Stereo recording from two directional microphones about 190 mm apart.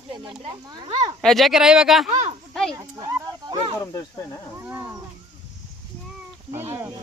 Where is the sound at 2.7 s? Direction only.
20° right (ahead or behind).